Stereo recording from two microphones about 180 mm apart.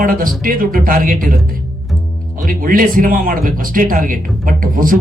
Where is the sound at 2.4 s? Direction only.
50° right (ahead or behind).